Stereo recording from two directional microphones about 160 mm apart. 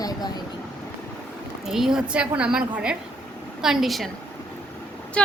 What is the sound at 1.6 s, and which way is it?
A woman's voice, 5° right (ahead or behind).